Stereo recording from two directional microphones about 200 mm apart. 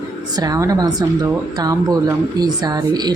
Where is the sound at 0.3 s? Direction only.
20° right (ahead or behind).